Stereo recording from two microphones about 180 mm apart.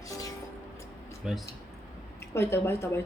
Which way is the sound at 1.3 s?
Centre (ahead or behind).